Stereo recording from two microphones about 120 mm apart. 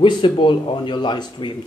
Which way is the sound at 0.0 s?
45° left (ahead or behind).